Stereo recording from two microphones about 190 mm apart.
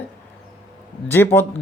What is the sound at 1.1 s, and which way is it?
Speech, 10° left (ahead or behind).